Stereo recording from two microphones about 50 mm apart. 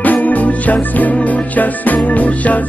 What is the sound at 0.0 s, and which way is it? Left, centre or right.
Music, left.